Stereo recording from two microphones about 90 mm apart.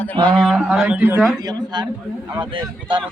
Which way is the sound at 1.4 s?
50° right (ahead or behind).